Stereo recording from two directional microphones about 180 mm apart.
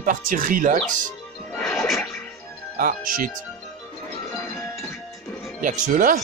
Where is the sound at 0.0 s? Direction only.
45° right (ahead or behind).